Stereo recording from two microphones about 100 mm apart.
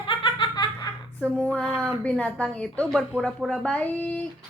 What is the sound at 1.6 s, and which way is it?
Speech, centre (ahead or behind).